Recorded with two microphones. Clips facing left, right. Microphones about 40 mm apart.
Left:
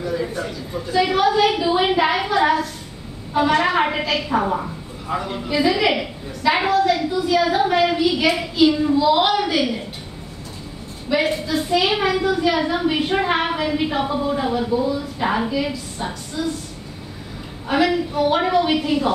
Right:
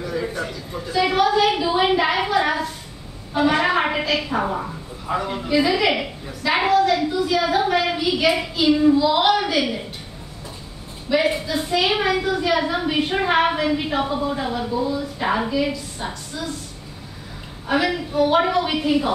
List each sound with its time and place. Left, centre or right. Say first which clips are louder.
0.0 s a sound: left 1 dB; centre
3.3 s a woman's voice: left 1 dB; centre
11.1 s a woman's voice: even; centre
17.6 s a woman's voice: left 3 dB; centre